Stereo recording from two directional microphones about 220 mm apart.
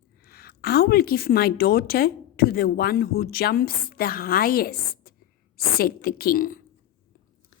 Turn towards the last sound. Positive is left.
turn(degrees=40)  # may be behind; listen again after turning